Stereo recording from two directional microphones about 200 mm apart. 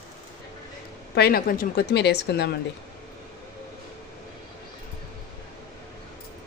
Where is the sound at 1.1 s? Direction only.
50° left (ahead or behind).